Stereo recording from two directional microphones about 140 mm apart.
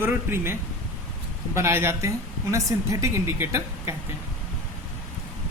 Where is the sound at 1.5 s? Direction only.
20° right (ahead or behind).